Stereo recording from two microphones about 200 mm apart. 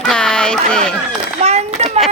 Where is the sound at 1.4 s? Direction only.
35° right (ahead or behind).